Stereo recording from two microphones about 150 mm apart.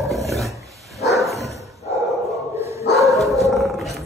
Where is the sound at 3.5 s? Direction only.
Centre (ahead or behind).